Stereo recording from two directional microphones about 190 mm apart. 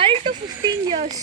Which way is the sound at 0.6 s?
25° right (ahead or behind).